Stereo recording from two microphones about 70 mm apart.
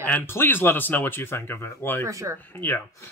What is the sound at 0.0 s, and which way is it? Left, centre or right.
Speech, left.